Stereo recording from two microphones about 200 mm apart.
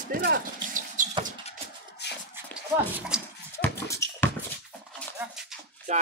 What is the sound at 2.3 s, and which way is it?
Dog, 10° right (ahead or behind).